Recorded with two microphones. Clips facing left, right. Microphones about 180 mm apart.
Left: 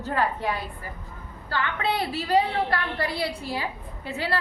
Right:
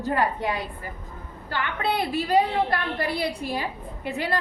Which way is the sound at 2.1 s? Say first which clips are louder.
Right 2 dB; 15° right (ahead or behind).